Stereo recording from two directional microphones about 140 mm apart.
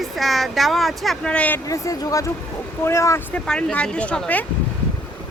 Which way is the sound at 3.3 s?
5° left (ahead or behind).